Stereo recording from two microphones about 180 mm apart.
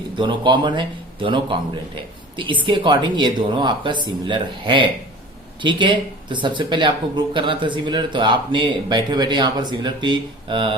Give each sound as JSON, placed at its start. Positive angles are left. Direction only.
{"t": 0.2, "sound": "speech", "side_deg": -25}